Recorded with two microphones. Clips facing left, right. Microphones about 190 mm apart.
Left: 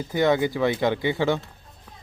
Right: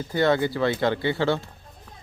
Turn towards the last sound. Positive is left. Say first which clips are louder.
# even
turn(degrees=15)  # may be behind; listen again after turning